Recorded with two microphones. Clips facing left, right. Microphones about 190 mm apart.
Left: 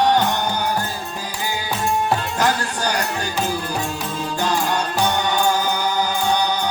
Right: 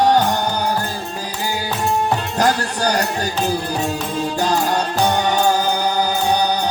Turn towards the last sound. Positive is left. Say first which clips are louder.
# right 2 dB
turn(degrees=-40)  # may be behind; listen again after turning